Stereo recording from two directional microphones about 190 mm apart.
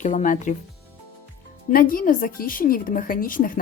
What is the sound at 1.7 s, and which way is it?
A woman's voice, 45° left (ahead or behind).